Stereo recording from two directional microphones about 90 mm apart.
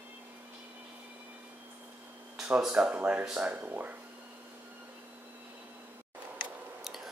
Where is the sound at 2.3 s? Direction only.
10° right (ahead or behind).